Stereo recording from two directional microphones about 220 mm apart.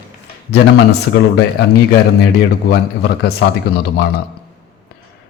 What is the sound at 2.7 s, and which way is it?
Speech, 50° left (ahead or behind).